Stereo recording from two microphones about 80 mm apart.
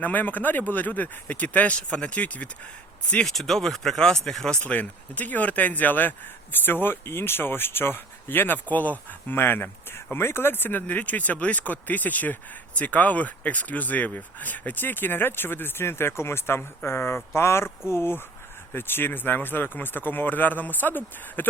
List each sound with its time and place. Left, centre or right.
0.0 s speech: left
3.2 s speech: centre
4.6 s speech: centre